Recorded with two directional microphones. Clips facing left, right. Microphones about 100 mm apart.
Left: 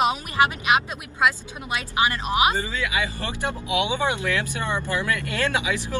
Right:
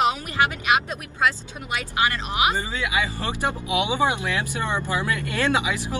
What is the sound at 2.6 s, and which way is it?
Speech, 20° right (ahead or behind).